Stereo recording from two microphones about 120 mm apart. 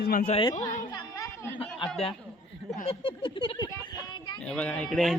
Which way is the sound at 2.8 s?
45° left (ahead or behind).